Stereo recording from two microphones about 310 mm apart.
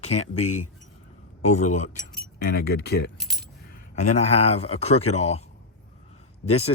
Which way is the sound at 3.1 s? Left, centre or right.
Centre.